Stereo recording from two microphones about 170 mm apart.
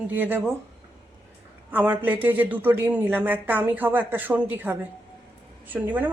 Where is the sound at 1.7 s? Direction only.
10° right (ahead or behind).